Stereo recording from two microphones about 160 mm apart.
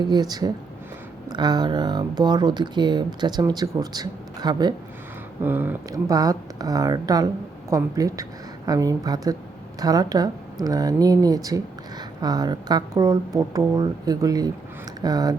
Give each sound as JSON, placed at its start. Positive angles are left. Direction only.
{"t": 0.0, "sound": "speech", "side_deg": -25}
{"t": 5.4, "sound": "speech", "side_deg": -10}